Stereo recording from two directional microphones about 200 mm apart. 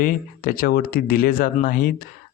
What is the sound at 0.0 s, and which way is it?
Speech, 45° left (ahead or behind).